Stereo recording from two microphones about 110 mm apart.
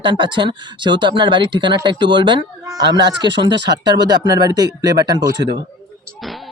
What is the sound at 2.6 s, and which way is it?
Speech, 35° right (ahead or behind).